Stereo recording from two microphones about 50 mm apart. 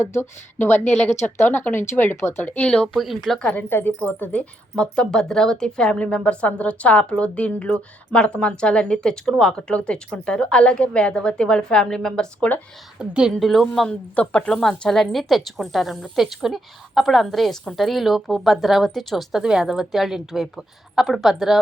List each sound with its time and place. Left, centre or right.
0.0 s a woman's voice: left
1.4 s speech: left
2.4 s a woman's voice: left
2.6 s a woman's voice: centre
2.9 s a woman's voice: centre
3.4 s speech: left
3.7 s speech: left
4.0 s speech: left
4.8 s a woman's voice: centre
13.0 s a woman's voice: centre
13.4 s a woman's voice: centre
14.2 s a woman's voice: centre